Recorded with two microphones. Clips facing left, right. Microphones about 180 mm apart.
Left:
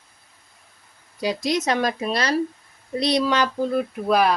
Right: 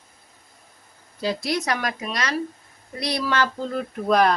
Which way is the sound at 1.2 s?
15° left (ahead or behind).